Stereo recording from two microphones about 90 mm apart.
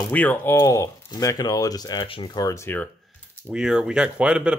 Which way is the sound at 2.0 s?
75° left (ahead or behind).